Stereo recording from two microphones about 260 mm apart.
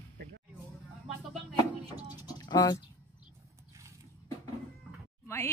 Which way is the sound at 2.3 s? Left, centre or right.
Centre.